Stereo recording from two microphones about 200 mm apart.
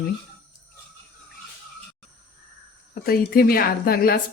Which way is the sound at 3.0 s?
50° left (ahead or behind).